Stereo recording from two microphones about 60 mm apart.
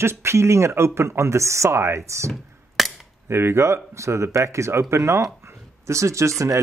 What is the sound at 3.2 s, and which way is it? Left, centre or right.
Speech, right.